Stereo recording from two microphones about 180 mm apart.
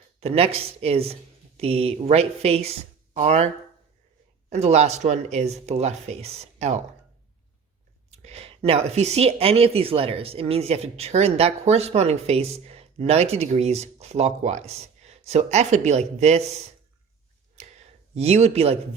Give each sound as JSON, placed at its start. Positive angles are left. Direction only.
{"t": 0.2, "sound": "speech", "side_deg": -35}
{"t": 8.2, "sound": "speech", "side_deg": -35}
{"t": 17.6, "sound": "a sound", "side_deg": -40}